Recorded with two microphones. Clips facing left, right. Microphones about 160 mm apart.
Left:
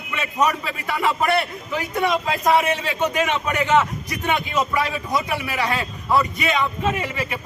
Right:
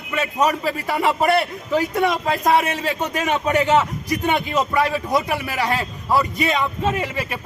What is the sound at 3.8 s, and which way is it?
Speech, 20° right (ahead or behind).